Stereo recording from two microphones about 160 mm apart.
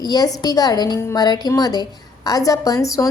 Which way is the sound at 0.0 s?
25° left (ahead or behind).